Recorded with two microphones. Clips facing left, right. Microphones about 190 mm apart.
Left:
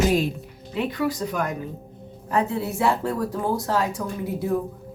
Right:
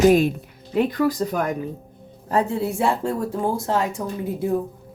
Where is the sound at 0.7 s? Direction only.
40° right (ahead or behind); by 3.9 s 25° right (ahead or behind).